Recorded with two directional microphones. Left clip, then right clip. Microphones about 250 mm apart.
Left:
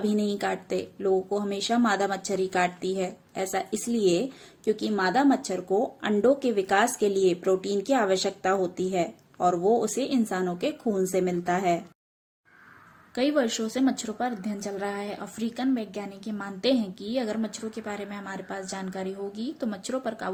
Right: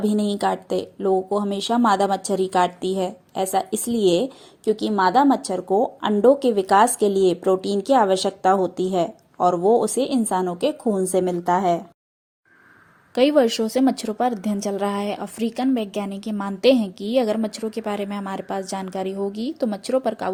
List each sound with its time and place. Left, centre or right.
0.0 s a woman's voice: right
13.1 s a woman's voice: right